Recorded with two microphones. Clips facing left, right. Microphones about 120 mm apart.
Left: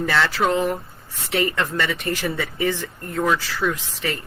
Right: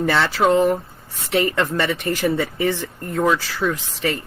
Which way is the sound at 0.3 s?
30° right (ahead or behind).